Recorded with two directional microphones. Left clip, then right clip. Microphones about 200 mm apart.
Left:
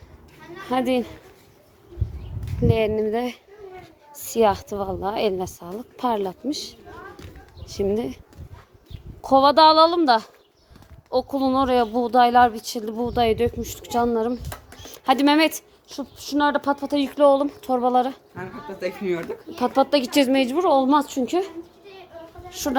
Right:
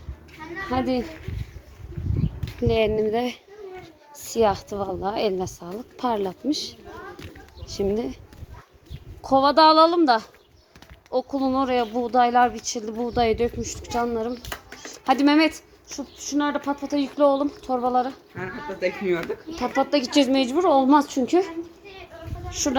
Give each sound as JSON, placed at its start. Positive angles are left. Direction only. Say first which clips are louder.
{"t": 0.7, "sound": "a woman's voice", "louder": "left 3 dB", "side_deg": 15}
{"t": 2.4, "sound": "speech", "louder": "even", "side_deg": 0}
{"t": 4.3, "sound": "a woman's voice", "louder": "left 2 dB", "side_deg": 15}
{"t": 7.8, "sound": "a woman's voice", "louder": "left 1 dB", "side_deg": 10}
{"t": 9.2, "sound": "speech", "louder": "left 2 dB", "side_deg": 25}
{"t": 9.6, "sound": "a woman's voice", "louder": "left 1 dB", "side_deg": 5}
{"t": 18.3, "sound": "speech", "louder": "right 3 dB", "side_deg": 40}
{"t": 19.5, "sound": "a woman's voice", "louder": "left 3 dB", "side_deg": 25}
{"t": 20.7, "sound": "a woman's voice", "louder": "right 1 dB", "side_deg": 0}
{"t": 22.6, "sound": "a woman's voice", "louder": "right 1 dB", "side_deg": 5}